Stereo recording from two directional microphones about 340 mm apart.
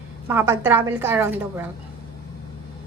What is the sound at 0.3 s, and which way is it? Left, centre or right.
A woman's voice, centre.